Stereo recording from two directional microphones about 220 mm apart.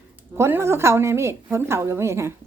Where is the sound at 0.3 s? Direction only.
10° right (ahead or behind).